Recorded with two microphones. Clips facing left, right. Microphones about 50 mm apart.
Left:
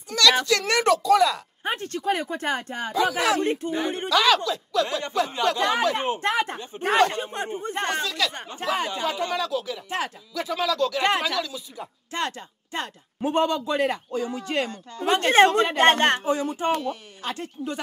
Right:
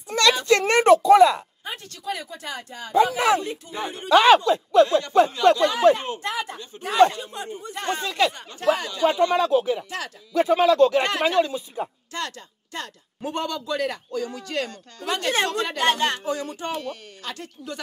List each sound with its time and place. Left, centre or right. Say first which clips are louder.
0.1 s a sound: even; right
0.5 s speech: right 5 dB; right
1.6 s speech: left 7 dB; left
4.1 s speech: right 6 dB; right
5.6 s speech: right 4 dB; left
8.0 s speech: right 4 dB; right
8.7 s speech: left 3 dB; left
9.3 s speech: right 7 dB; right
9.8 s speech: left 4 dB; left
10.3 s speech: right 9 dB; right
12.1 s speech: left 3 dB; left
16.3 s speech: left 4 dB; left